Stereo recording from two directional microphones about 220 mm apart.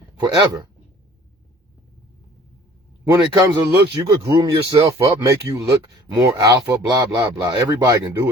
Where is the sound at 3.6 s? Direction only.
20° right (ahead or behind).